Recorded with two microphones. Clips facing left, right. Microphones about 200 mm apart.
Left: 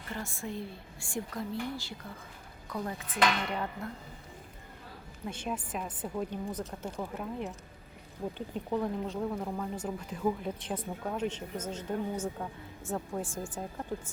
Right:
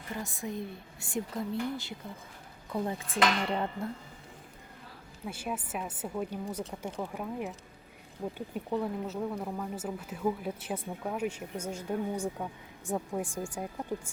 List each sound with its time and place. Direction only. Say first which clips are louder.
0.1 s a woman's voice: right 1 dB; 15° right (ahead or behind)
5.2 s speech: even; 5° right (ahead or behind)